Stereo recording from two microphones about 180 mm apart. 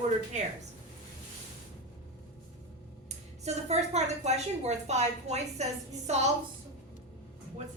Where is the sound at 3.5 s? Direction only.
40° right (ahead or behind).